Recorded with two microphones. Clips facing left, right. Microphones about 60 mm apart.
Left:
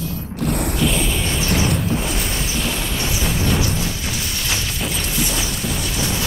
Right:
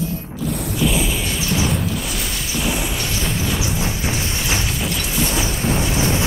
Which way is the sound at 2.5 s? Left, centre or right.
Centre.